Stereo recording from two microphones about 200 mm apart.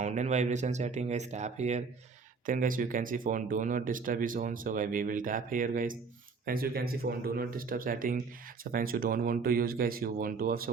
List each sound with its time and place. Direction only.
0.0 s speech: 35° right (ahead or behind)